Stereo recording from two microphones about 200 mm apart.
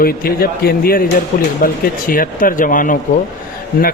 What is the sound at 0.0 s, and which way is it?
A man's voice, 50° left (ahead or behind).